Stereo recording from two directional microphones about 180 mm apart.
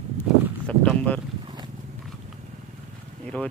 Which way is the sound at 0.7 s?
5° left (ahead or behind).